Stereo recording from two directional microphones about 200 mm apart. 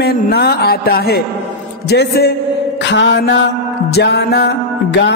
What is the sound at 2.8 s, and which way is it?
Music, 65° left (ahead or behind).